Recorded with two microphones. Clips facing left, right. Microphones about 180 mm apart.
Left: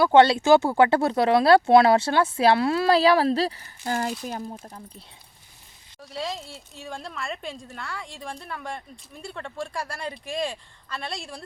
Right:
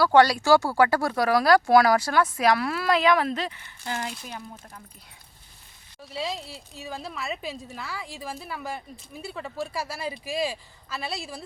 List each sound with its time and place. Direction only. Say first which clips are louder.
0.0 s speech: left 2 dB; 25° left (ahead or behind)
6.0 s speech: even; centre (ahead or behind)